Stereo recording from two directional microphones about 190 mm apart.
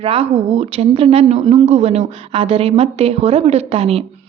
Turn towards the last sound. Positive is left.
turn(degrees=-30)  # may be behind; listen again after turning